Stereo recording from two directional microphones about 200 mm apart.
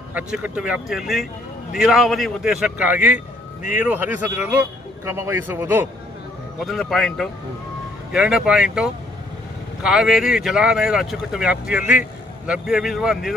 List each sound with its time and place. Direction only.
0.1 s a man's voice: 5° right (ahead or behind)
6.6 s speech: centre (ahead or behind)